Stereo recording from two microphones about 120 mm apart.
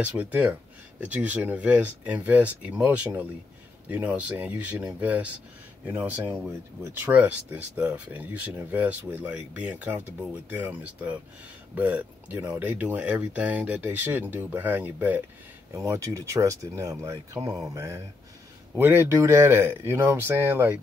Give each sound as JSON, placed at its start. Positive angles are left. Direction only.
{"t": 0.0, "sound": "speech", "side_deg": -15}